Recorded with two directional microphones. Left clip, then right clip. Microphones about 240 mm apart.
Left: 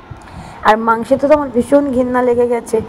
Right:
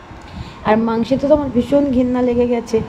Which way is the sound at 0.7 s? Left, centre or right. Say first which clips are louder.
Left 5 dB; centre.